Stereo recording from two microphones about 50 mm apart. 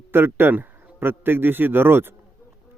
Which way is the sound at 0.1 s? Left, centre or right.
Right.